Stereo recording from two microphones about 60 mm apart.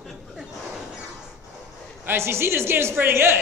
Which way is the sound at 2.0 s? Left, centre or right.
Right.